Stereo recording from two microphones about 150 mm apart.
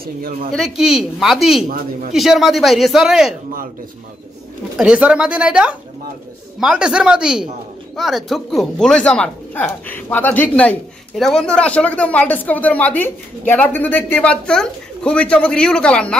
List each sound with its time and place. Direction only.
0.0 s speech: 75° right (ahead or behind)
0.5 s a woman's voice: centre (ahead or behind)
4.7 s a woman's voice: 5° right (ahead or behind)